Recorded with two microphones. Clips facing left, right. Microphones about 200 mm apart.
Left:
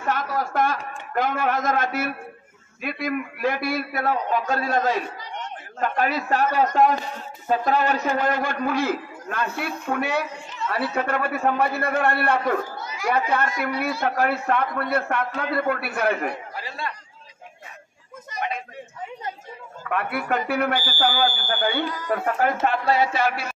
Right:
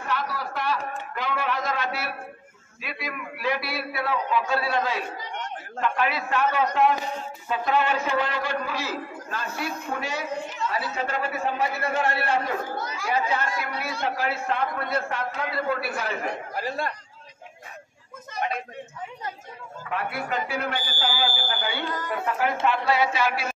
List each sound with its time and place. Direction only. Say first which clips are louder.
0.0 s a man's voice: left 4 dB; 45° left (ahead or behind)
16.5 s speech: right 4 dB; 45° right (ahead or behind)
19.9 s a man's voice: left 4 dB; 60° left (ahead or behind)